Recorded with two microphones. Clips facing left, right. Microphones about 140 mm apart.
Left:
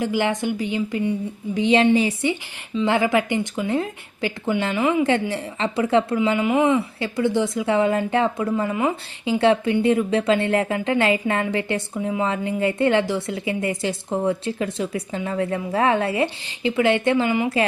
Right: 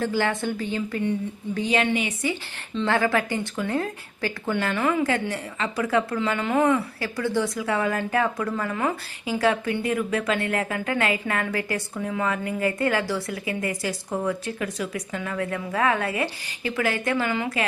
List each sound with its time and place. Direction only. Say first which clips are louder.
0.0 s a woman's voice: left 3 dB; 15° left (ahead or behind); by 2.3 s 35° left (ahead or behind)
2.8 s speech: left 3 dB; 15° left (ahead or behind)
5.3 s a woman's voice: left 4 dB; 25° left (ahead or behind)
6.1 s a woman's voice: left 4 dB; 15° left (ahead or behind)